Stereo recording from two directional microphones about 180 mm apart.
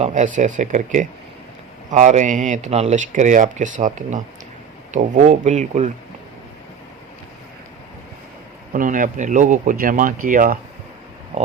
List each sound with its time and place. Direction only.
0.0 s speech: 45° right (ahead or behind)
8.7 s speech: 50° right (ahead or behind)
11.3 s speech: 40° right (ahead or behind)